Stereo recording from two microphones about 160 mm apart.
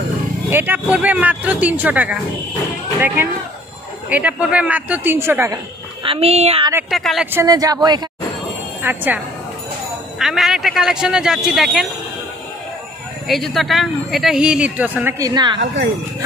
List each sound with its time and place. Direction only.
0.5 s speech: 10° right (ahead or behind)
4.1 s speech: 10° right (ahead or behind)
6.0 s speech: 40° right (ahead or behind)
6.9 s speech: centre (ahead or behind)
7.3 s speech: 25° right (ahead or behind)
8.8 s speech: 10° right (ahead or behind)
13.3 s speech: centre (ahead or behind)
15.1 s speech: 25° right (ahead or behind)